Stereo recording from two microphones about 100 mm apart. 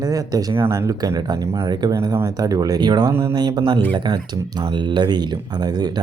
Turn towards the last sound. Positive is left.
turn(degrees=-40)  # may be behind; listen again after turning